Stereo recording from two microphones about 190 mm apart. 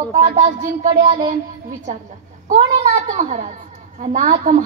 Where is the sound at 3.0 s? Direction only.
45° right (ahead or behind).